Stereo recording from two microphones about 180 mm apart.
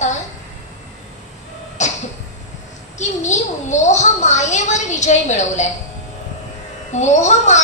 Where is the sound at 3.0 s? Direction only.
40° left (ahead or behind).